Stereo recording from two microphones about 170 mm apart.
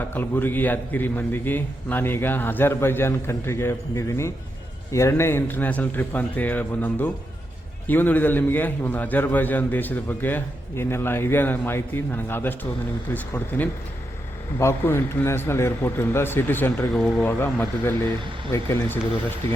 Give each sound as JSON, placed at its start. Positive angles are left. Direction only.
{"t": 0.1, "sound": "a man's voice", "side_deg": 10}